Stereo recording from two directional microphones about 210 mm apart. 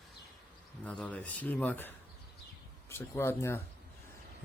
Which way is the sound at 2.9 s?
10° left (ahead or behind).